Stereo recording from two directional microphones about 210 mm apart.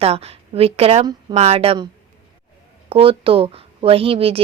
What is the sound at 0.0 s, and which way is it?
Speech, 30° right (ahead or behind).